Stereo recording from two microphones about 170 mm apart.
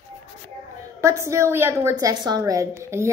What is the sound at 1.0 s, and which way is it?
A woman's voice, 15° right (ahead or behind).